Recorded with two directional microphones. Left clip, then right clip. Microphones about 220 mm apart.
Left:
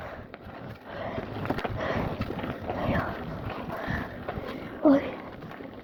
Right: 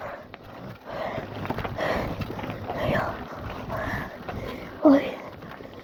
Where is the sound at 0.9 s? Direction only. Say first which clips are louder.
Right 4 dB; 55° right (ahead or behind).